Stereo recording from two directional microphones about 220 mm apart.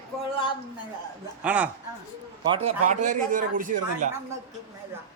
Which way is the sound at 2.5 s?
25° right (ahead or behind).